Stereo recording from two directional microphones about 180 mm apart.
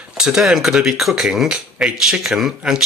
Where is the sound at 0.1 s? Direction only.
5° right (ahead or behind).